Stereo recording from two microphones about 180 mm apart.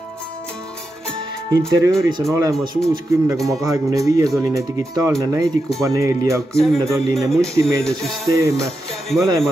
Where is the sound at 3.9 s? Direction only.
20° right (ahead or behind).